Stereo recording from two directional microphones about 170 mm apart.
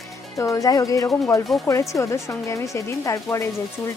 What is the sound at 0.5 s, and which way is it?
Speech, 20° left (ahead or behind).